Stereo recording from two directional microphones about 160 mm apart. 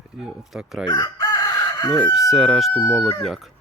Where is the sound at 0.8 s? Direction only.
25° left (ahead or behind).